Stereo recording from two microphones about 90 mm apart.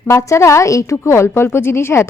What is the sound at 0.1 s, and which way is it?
A woman's voice, 35° left (ahead or behind).